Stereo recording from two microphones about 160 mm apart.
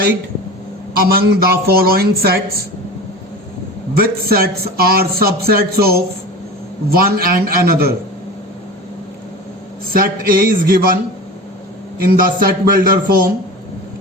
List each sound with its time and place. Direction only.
0.9 s a man's voice: 75° right (ahead or behind)
3.9 s a man's voice: 75° right (ahead or behind)
9.9 s a man's voice: 65° right (ahead or behind)
11.9 s a man's voice: 65° right (ahead or behind)